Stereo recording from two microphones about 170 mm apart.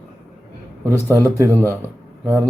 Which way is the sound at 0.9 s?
15° right (ahead or behind).